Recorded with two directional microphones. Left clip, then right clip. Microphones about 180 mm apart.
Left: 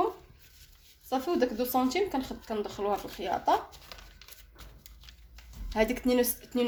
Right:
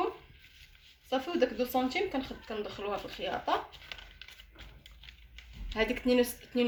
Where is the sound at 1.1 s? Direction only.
35° left (ahead or behind).